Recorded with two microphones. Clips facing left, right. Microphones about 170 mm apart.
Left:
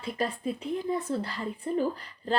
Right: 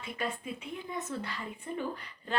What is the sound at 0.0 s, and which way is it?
A woman's voice, 35° left (ahead or behind).